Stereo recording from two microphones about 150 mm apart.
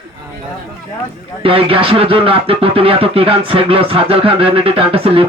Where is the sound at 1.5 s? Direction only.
40° right (ahead or behind).